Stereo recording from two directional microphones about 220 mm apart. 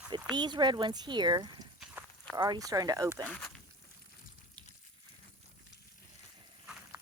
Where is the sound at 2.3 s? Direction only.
15° right (ahead or behind).